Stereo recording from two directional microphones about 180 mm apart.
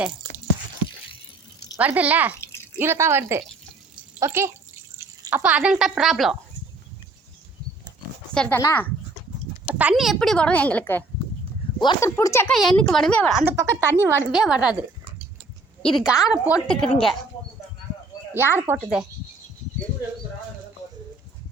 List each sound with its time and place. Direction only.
1.7 s speech: 10° right (ahead or behind)
2.4 s drip: 15° left (ahead or behind)
2.7 s speech: 15° right (ahead or behind)
8.3 s speech: 5° left (ahead or behind)
9.6 s a woman's voice: 10° right (ahead or behind); by 11.0 s 10° left (ahead or behind)
11.8 s speech: 25° left (ahead or behind)
12.0 s speech: 15° left (ahead or behind)
12.5 s a woman's voice: centre (ahead or behind)
13.4 s a woman's voice: 15° right (ahead or behind)
15.8 s a woman's voice: centre (ahead or behind)
18.3 s speech: 10° right (ahead or behind)